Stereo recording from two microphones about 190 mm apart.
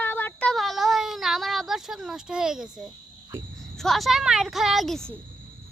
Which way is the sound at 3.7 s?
Centre (ahead or behind).